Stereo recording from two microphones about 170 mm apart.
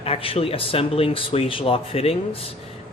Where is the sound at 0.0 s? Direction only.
35° left (ahead or behind).